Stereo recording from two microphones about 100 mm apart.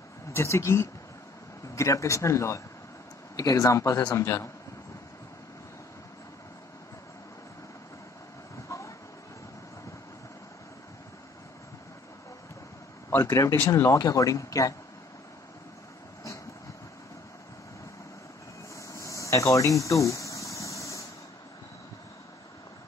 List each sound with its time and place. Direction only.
0.3 s speech: 30° left (ahead or behind)
8.6 s train: 30° left (ahead or behind)
13.1 s speech: 30° left (ahead or behind)
18.8 s a sound: 30° left (ahead or behind)